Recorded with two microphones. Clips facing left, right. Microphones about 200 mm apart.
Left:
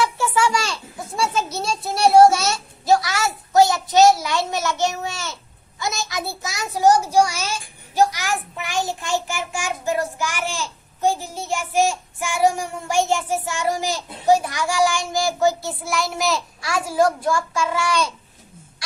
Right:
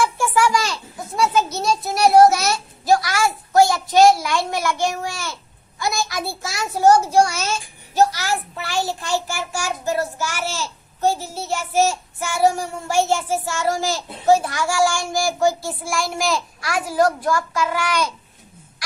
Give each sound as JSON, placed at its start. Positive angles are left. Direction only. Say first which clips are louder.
{"t": 0.3, "sound": "a sound", "louder": "right 2 dB", "side_deg": 25}
{"t": 5.8, "sound": "a child's voice", "louder": "right 2 dB", "side_deg": 20}
{"t": 8.5, "sound": "child singing", "louder": "right 1 dB", "side_deg": 15}
{"t": 15.8, "sound": "a child's voice", "louder": "even", "side_deg": 20}